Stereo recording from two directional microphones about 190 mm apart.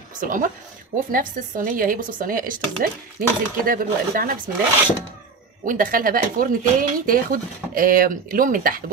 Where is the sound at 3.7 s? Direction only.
50° right (ahead or behind).